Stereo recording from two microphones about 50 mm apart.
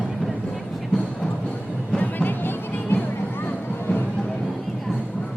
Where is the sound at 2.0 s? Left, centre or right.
Left.